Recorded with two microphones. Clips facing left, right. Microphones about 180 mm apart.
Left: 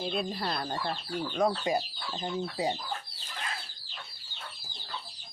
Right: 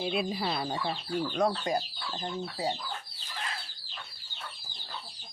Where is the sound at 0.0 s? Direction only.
10° right (ahead or behind).